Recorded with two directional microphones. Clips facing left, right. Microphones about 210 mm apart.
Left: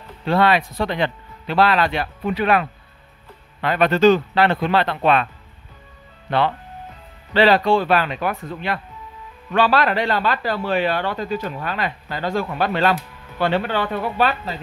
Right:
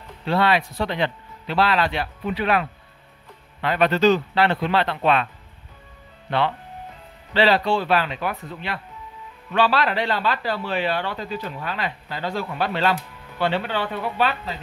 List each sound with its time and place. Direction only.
0.3 s speech: 50° left (ahead or behind)
3.6 s speech: 50° left (ahead or behind)
7.3 s speech: 50° left (ahead or behind)